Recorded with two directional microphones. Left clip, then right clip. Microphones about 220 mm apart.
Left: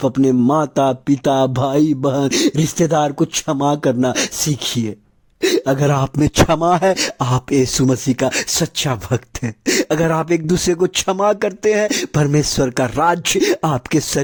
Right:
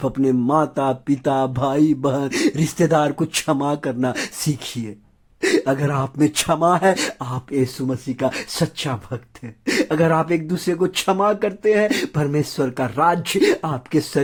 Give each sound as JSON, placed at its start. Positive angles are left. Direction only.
{"t": 0.0, "sound": "speech", "side_deg": 30}